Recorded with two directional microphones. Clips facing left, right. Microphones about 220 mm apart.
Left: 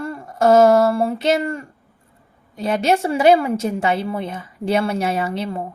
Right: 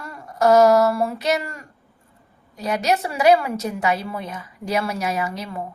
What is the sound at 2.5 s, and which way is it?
A woman's voice, 25° left (ahead or behind).